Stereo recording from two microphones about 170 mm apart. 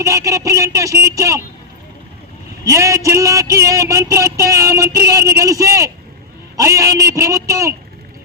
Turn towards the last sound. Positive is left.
turn(degrees=-20)  # may be behind; listen again after turning